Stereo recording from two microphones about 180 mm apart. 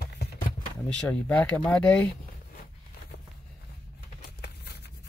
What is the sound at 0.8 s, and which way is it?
Speech, 10° left (ahead or behind).